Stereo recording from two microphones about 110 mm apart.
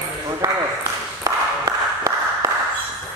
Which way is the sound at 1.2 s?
30° right (ahead or behind).